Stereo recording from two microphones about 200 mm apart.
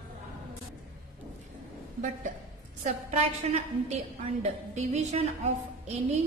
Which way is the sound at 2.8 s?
35° right (ahead or behind).